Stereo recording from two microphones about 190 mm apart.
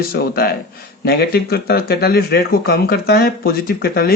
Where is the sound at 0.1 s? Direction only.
55° left (ahead or behind).